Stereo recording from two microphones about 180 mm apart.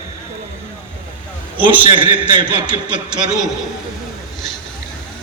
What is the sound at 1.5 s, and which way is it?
A man's voice, 30° right (ahead or behind).